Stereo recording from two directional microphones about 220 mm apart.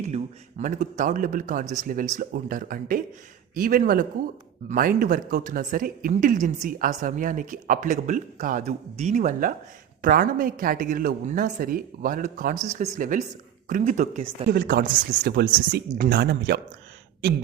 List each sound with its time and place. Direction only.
0.0 s speech: 30° right (ahead or behind); by 16.6 s 50° right (ahead or behind)